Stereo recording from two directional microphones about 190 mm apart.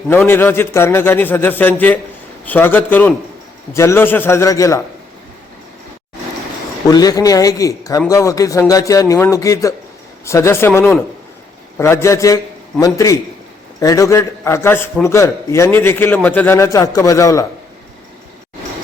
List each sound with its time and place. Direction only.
0.3 s a man's voice: 10° left (ahead or behind)
6.8 s a man's voice: 20° left (ahead or behind)